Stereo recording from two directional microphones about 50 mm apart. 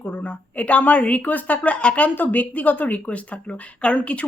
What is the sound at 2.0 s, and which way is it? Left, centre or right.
A woman's voice, left.